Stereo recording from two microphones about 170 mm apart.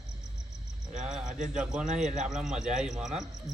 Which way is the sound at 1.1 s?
5° right (ahead or behind).